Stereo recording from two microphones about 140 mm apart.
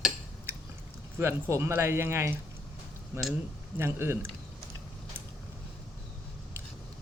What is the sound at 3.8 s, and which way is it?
Speech, 20° right (ahead or behind).